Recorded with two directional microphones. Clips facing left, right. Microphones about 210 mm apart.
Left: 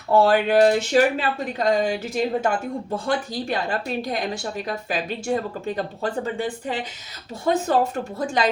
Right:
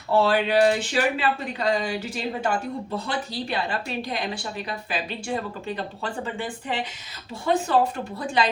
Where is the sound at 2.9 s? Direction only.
50° left (ahead or behind).